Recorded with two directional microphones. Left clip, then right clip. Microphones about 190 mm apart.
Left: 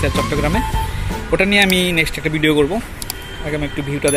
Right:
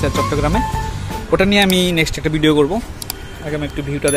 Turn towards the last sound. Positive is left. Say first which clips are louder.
# even
turn(degrees=0)  # may be behind; listen again after turning